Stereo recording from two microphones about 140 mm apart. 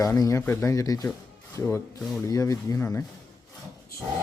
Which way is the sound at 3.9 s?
90° left.